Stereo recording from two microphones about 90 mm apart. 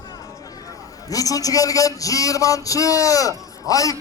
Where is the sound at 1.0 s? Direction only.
40° left (ahead or behind).